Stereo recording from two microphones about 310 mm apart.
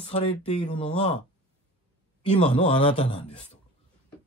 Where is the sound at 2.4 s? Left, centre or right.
Centre.